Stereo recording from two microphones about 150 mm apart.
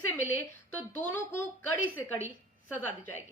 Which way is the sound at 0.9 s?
15° left (ahead or behind).